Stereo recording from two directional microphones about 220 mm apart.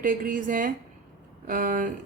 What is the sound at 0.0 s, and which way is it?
Speech, 40° right (ahead or behind).